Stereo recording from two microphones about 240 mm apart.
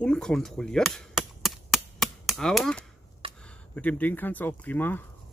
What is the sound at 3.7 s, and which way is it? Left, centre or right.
Speech, centre.